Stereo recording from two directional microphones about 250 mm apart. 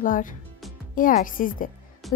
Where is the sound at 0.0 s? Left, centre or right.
Left.